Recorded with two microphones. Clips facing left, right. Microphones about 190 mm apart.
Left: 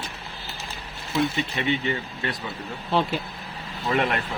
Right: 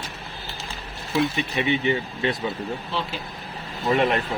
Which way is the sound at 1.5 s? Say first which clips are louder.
Right 6 dB; 20° right (ahead or behind).